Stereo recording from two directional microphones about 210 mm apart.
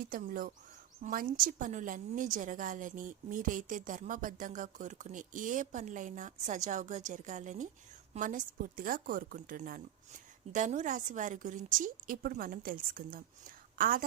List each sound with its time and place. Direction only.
0.0 s a woman's voice: 45° right (ahead or behind)